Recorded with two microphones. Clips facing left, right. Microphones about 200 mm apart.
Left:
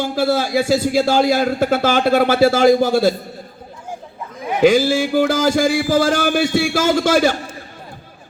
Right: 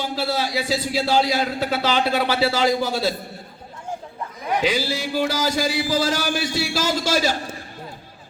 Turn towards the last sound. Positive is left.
turn(degrees=55)  # may be behind; listen again after turning